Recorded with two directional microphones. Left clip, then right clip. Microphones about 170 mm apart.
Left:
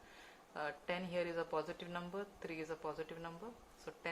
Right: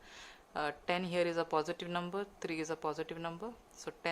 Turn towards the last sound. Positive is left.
turn(degrees=-55)  # may be behind; listen again after turning